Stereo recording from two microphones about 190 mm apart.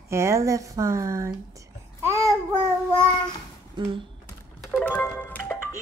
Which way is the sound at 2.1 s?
15° right (ahead or behind).